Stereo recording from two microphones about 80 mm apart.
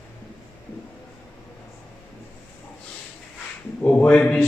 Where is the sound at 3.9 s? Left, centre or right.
Centre.